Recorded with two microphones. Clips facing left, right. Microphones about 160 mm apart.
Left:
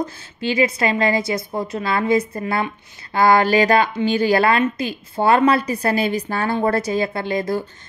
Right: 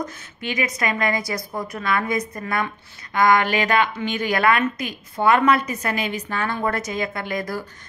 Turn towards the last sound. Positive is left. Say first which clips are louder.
# left 5 dB
turn(degrees=25)  # may be behind; listen again after turning